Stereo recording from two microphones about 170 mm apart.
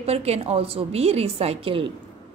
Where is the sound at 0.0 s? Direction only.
40° right (ahead or behind).